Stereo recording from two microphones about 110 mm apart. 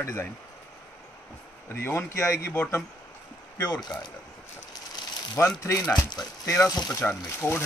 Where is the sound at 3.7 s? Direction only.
40° left (ahead or behind).